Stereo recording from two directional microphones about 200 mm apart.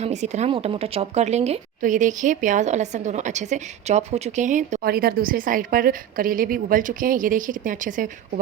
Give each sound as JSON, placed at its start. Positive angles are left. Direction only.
{"t": 0.0, "sound": "a woman's voice", "side_deg": -35}